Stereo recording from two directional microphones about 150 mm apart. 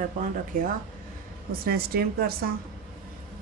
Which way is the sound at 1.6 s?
90° right.